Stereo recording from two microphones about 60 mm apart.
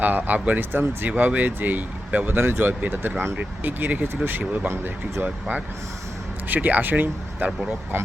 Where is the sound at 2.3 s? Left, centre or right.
Right.